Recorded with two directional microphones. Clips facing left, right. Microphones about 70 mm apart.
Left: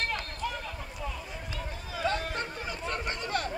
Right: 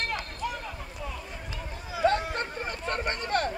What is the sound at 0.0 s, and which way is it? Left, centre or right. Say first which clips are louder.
Chatter: right 1 dB; centre.